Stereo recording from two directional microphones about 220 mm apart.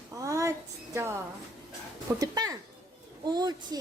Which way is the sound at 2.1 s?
15° right (ahead or behind).